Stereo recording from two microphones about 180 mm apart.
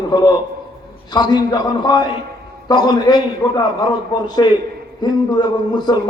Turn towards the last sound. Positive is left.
turn(degrees=20)  # may be behind; listen again after turning